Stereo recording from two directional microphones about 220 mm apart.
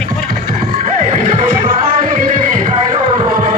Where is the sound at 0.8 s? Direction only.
35° right (ahead or behind).